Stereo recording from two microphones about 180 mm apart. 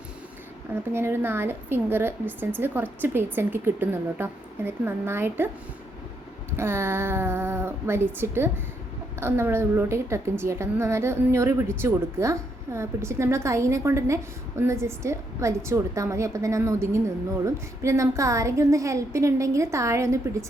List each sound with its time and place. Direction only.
0.9 s a woman's voice: 10° right (ahead or behind)
6.6 s a woman's voice: 15° right (ahead or behind)